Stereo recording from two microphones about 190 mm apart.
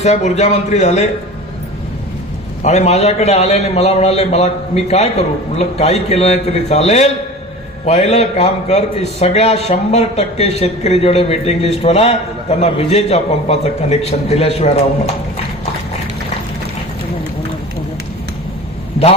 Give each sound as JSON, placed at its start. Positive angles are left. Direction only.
{"t": 0.0, "sound": "a man's voice", "side_deg": 35}
{"t": 2.6, "sound": "a man's voice", "side_deg": 35}